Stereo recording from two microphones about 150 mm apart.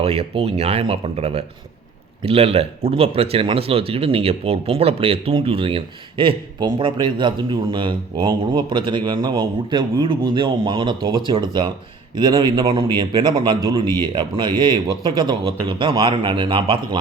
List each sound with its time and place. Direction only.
0.0 s speech: 45° right (ahead or behind)